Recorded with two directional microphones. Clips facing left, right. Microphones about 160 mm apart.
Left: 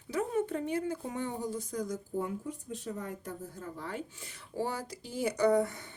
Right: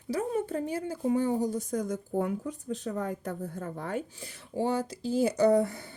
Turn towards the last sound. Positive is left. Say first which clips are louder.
# right 4 dB
turn(degrees=-30)  # may be behind; listen again after turning